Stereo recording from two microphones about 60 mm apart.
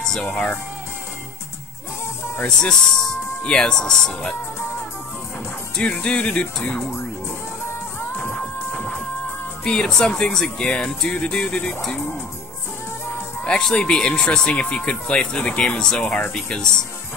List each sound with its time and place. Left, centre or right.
0.0 s music: centre
2.4 s speech: centre
5.8 s speech: centre
8.2 s music: left
9.7 s speech: centre
13.4 s speech: centre